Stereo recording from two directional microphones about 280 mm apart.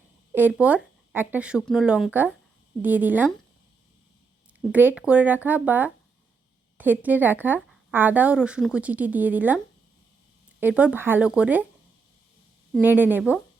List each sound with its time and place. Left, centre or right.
0.3 s speech: centre
4.7 s speech: centre
10.6 s speech: centre
12.7 s speech: centre